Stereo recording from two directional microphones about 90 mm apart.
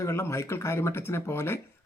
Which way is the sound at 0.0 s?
30° left (ahead or behind).